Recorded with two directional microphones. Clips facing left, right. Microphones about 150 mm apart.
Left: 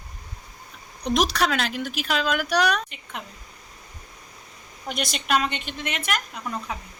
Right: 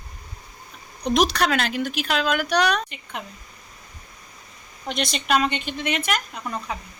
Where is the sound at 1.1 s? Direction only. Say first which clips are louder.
Right 2 dB; centre (ahead or behind).